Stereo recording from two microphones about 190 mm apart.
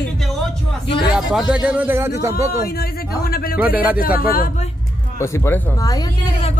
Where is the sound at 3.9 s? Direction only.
50° left (ahead or behind).